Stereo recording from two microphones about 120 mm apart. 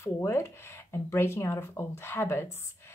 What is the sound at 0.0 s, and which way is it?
Speech, 20° left (ahead or behind).